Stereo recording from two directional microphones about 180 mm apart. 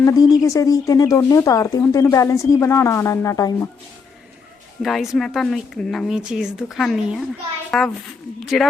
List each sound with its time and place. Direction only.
0.0 s speech: 20° left (ahead or behind)
4.8 s speech: centre (ahead or behind)